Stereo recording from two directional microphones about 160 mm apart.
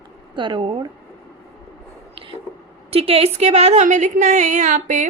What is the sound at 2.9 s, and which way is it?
A woman's voice, 40° right (ahead or behind).